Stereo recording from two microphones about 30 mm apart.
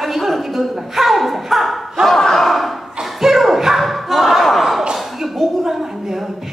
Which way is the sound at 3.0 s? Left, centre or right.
Centre.